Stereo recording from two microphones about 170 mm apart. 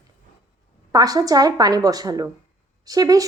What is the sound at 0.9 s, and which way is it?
A woman's voice, 20° right (ahead or behind).